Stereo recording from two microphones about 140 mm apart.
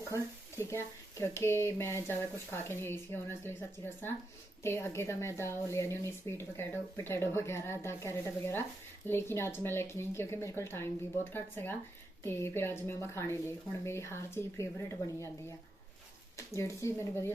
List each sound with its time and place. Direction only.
0.6 s speech: 20° left (ahead or behind)